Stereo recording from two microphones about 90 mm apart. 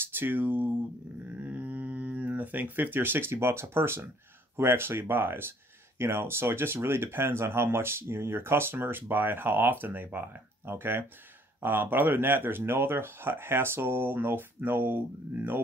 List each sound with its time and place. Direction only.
0.0 s speech: 25° right (ahead or behind)
1.4 s a sound: 20° right (ahead or behind)
4.6 s speech: 25° right (ahead or behind)